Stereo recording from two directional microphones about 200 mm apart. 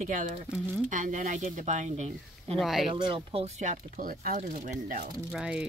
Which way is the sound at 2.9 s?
25° right (ahead or behind).